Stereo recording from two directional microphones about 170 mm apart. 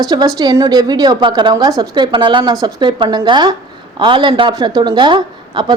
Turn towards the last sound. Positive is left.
turn(degrees=-25)  # may be behind; listen again after turning